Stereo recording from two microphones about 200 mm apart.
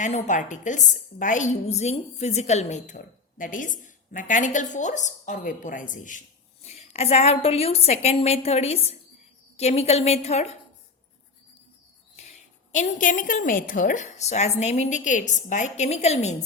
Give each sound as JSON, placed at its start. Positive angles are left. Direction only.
{"t": 0.0, "sound": "a woman's voice", "side_deg": 35}
{"t": 12.7, "sound": "a woman's voice", "side_deg": 40}